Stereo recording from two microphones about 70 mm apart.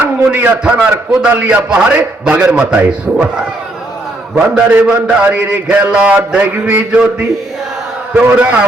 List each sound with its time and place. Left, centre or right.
0.3 s a man's voice: right
4.5 s a man's voice: centre
8.1 s a man's voice: centre